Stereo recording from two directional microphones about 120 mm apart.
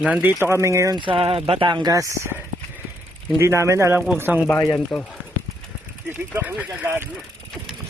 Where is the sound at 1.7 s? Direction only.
30° right (ahead or behind).